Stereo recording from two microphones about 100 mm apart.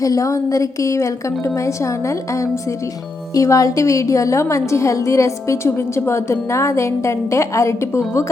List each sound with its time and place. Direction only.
0.0 s a woman's voice: 35° left (ahead or behind)